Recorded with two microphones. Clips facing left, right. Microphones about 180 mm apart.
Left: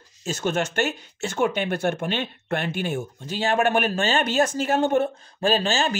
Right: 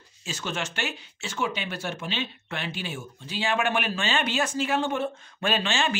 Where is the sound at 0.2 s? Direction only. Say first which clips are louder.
Left 8 dB; 45° left (ahead or behind).